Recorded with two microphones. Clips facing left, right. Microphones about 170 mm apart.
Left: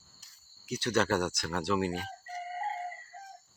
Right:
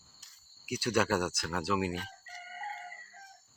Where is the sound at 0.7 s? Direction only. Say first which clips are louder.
Left 1 dB; 10° right (ahead or behind).